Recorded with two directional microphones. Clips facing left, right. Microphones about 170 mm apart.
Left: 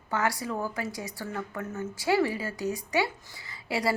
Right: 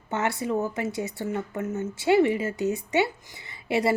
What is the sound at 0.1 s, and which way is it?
Speech, 25° right (ahead or behind).